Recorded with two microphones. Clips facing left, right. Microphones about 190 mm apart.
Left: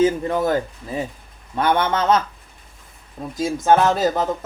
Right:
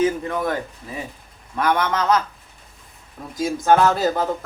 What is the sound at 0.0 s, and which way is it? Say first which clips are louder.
Speech: left 3 dB; 30° left (ahead or behind).